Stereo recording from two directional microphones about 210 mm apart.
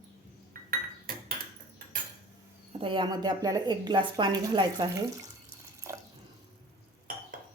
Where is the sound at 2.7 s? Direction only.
25° right (ahead or behind).